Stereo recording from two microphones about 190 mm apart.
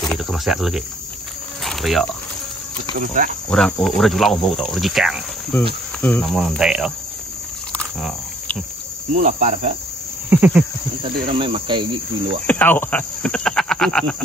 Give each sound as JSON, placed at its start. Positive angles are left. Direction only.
{"t": 0.1, "sound": "cricket", "side_deg": 0}
{"t": 3.4, "sound": "cricket", "side_deg": 5}
{"t": 9.1, "sound": "cricket", "side_deg": -40}
{"t": 10.3, "sound": "cricket", "side_deg": -10}
{"t": 11.3, "sound": "cricket", "side_deg": -25}
{"t": 12.4, "sound": "speech", "side_deg": 10}